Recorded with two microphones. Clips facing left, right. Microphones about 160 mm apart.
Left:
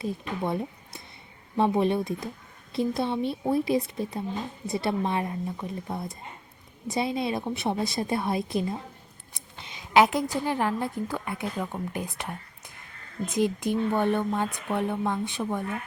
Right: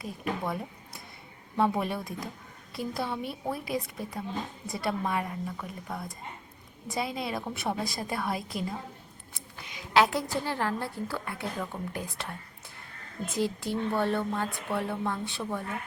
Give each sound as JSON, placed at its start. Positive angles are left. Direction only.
{"t": 0.0, "sound": "a woman's voice", "side_deg": 25}